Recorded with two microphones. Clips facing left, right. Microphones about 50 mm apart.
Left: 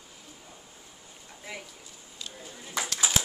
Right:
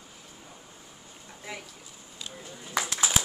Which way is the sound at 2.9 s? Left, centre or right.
Centre.